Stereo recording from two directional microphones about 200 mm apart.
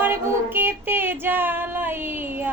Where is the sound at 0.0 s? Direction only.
10° right (ahead or behind).